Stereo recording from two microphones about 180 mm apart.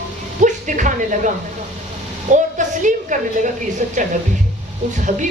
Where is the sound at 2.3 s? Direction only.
45° right (ahead or behind).